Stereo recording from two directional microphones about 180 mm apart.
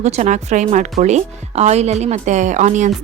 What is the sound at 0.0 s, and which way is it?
Speech, 40° right (ahead or behind).